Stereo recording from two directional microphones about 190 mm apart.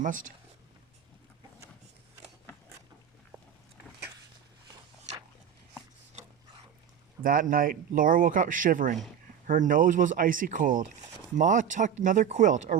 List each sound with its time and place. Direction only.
0.0 s speech: 45° right (ahead or behind)
7.2 s speech: 45° right (ahead or behind)